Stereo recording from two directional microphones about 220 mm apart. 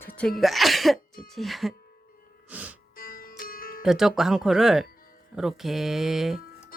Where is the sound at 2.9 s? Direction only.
40° left (ahead or behind).